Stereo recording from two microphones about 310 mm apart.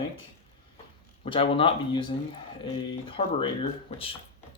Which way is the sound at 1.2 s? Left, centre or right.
Centre.